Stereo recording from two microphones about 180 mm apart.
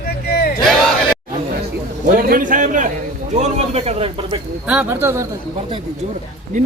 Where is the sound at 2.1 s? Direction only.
50° right (ahead or behind).